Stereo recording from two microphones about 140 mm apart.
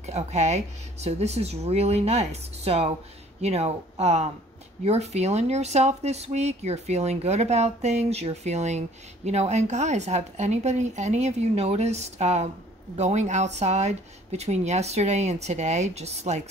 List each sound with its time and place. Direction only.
0.0 s speech: 55° right (ahead or behind)